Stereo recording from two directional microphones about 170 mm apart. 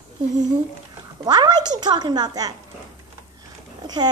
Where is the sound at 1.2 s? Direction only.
25° right (ahead or behind).